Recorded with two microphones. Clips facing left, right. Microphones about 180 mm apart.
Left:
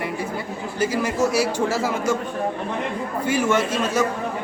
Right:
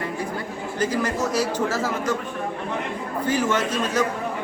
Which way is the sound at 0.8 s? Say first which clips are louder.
Left 2 dB; 10° left (ahead or behind).